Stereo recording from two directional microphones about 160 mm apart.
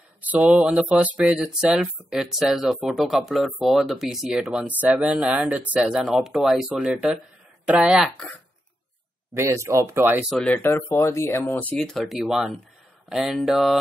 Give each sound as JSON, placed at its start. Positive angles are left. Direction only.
{"t": 0.2, "sound": "speech", "side_deg": -10}
{"t": 9.3, "sound": "speech", "side_deg": -15}
{"t": 10.3, "sound": "speech", "side_deg": 10}